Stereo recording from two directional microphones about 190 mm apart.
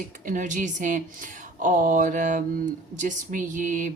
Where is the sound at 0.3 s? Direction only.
45° right (ahead or behind).